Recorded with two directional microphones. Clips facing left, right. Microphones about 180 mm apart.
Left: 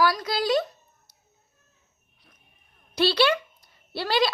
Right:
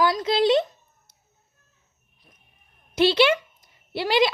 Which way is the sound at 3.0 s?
20° right (ahead or behind).